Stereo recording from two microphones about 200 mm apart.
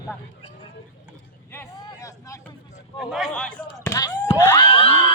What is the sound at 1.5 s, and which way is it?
Vehicle, 10° left (ahead or behind).